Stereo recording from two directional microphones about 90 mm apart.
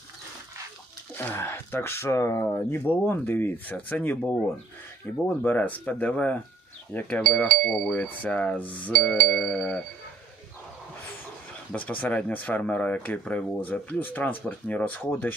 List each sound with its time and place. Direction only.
1.1 s speech: 25° left (ahead or behind)
5.4 s cutlery: 15° left (ahead or behind)
11.7 s cutlery: 15° left (ahead or behind)
13.6 s speech: 20° left (ahead or behind)